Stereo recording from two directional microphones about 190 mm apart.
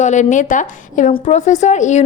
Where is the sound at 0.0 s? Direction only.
40° left (ahead or behind).